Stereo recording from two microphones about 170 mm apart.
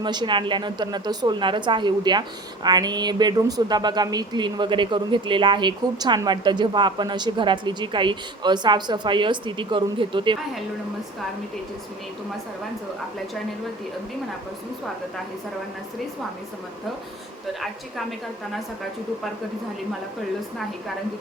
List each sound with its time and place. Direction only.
0.0 s speech: 25° right (ahead or behind)